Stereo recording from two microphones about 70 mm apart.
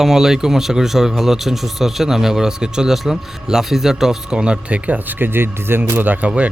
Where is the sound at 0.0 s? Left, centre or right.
Centre.